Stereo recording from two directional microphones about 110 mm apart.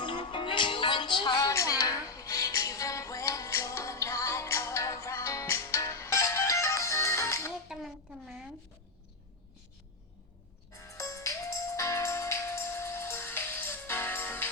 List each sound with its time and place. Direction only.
0.0 s music: 45° left (ahead or behind)
1.5 s music: 30° left (ahead or behind)
7.7 s a sound: 5° right (ahead or behind)
10.7 s music: 25° left (ahead or behind)